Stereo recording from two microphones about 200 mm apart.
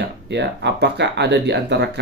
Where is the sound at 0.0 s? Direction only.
60° right (ahead or behind).